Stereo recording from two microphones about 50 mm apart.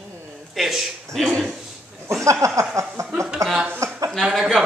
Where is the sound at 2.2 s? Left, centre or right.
Right.